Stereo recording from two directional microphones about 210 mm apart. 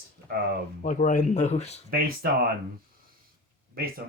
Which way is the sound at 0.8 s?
40° left (ahead or behind).